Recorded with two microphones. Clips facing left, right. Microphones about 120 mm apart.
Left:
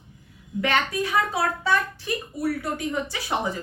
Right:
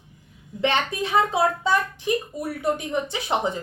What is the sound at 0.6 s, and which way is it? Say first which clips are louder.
A woman's voice: right 1 dB; 25° right (ahead or behind).